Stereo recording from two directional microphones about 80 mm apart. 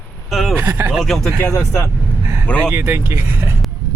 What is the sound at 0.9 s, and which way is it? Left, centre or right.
Speech, centre.